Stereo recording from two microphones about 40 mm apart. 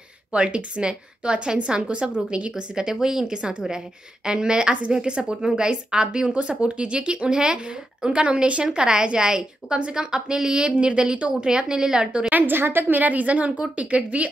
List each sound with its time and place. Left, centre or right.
0.3 s a woman's voice: right
8.6 s a woman's voice: centre
12.0 s a woman's voice: right
12.3 s a woman's voice: right
12.9 s a woman's voice: right